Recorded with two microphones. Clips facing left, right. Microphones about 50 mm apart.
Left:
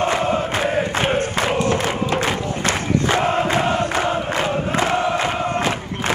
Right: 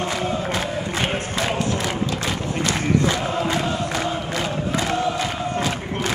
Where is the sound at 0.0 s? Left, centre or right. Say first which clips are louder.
Left 5 dB; left.